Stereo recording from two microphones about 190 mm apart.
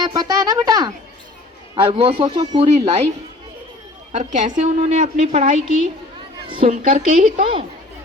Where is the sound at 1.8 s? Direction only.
30° right (ahead or behind).